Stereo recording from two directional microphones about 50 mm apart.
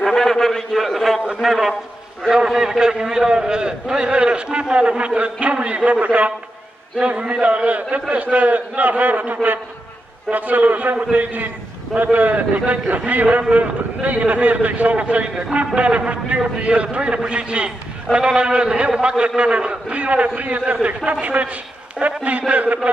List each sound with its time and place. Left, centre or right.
0.0 s a man's voice: centre; by 22.8 s right